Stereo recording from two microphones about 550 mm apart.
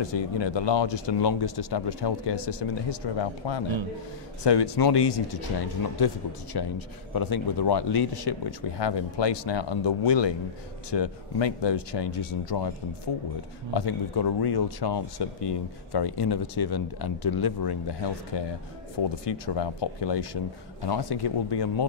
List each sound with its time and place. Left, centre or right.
0.0 s speech: left
6.5 s a man's voice: left
13.7 s speech: left